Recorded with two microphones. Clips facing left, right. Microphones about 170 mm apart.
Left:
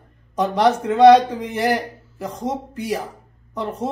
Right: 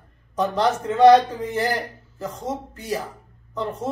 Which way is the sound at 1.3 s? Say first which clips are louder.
Left 3 dB; 15° left (ahead or behind).